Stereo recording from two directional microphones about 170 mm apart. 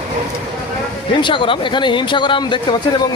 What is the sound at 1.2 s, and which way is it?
Speech, 30° left (ahead or behind).